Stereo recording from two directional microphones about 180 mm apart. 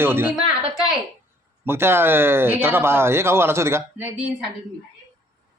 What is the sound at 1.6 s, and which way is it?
Speech, 15° right (ahead or behind).